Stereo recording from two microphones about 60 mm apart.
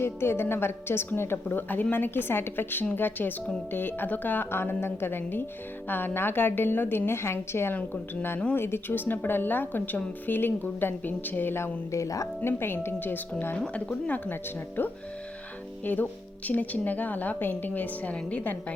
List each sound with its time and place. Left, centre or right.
0.0 s a woman's voice: left
12.5 s a woman's voice: left
13.7 s a woman's voice: left
14.8 s a woman's voice: left